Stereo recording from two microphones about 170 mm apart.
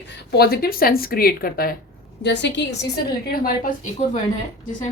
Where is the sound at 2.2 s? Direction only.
90° left.